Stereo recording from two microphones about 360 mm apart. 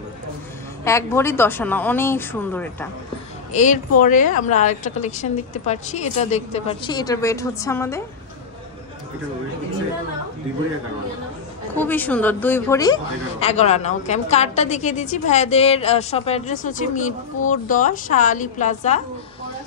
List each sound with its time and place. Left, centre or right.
0.8 s speech: centre
3.5 s a woman's voice: centre
11.7 s a woman's voice: centre